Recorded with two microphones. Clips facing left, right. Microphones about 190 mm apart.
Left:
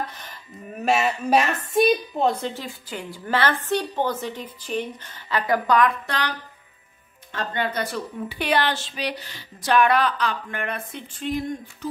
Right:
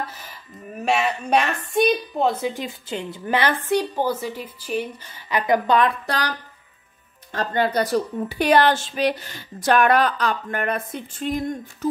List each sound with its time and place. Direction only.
0.1 s a woman's voice: 5° right (ahead or behind); by 6.3 s 40° right (ahead or behind)
7.3 s speech: 40° right (ahead or behind)